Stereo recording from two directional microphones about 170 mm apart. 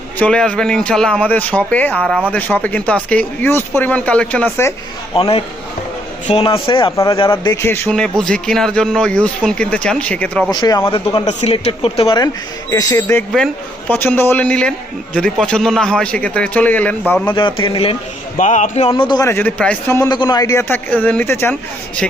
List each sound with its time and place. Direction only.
0.2 s speech: 5° left (ahead or behind)
5.1 s speech: 30° left (ahead or behind)
6.9 s speech: 20° left (ahead or behind)
10.5 s speech: 25° left (ahead or behind)
11.3 s speech: 40° left (ahead or behind)
12.7 s speech: 15° left (ahead or behind)
17.3 s speech: 30° left (ahead or behind)
18.3 s speech: 45° left (ahead or behind)
18.9 s speech: 30° left (ahead or behind); by 21.5 s 10° left (ahead or behind)